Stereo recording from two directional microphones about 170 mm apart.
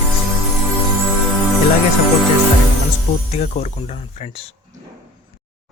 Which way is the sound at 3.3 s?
40° left (ahead or behind).